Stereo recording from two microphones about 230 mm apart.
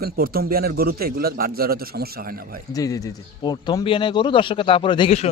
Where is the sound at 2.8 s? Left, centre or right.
Centre.